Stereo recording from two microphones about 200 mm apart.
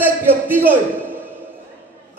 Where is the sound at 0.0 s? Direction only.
10° right (ahead or behind).